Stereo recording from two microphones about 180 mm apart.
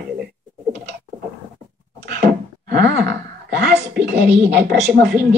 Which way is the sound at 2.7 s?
60° right (ahead or behind).